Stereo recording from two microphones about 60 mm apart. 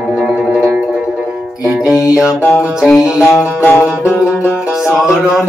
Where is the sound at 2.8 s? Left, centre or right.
Centre.